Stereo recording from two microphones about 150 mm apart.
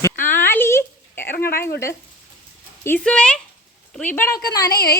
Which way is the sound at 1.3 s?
85° left.